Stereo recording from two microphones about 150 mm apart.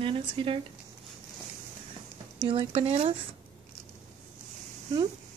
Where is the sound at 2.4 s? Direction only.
35° right (ahead or behind).